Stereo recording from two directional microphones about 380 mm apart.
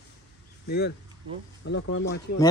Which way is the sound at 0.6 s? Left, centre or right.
Left.